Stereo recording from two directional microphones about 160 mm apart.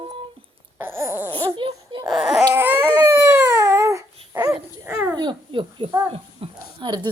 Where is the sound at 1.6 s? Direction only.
30° right (ahead or behind).